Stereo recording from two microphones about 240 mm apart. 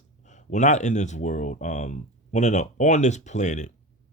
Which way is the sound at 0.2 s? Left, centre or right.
Left.